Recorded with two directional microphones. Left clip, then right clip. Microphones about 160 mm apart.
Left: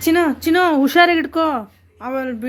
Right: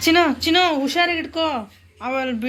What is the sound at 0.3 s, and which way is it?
Speech, 50° left (ahead or behind).